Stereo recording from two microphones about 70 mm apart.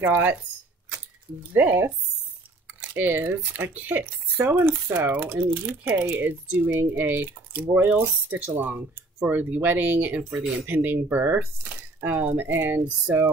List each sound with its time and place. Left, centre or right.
0.0 s speech: right
1.5 s speech: right
2.9 s speech: right
4.6 s speech: right
4.9 s speech: right